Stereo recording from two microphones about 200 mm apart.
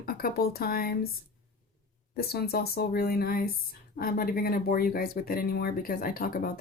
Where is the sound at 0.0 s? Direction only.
50° left (ahead or behind).